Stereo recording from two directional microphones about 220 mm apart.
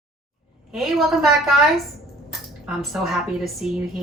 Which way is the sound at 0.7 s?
Centre (ahead or behind).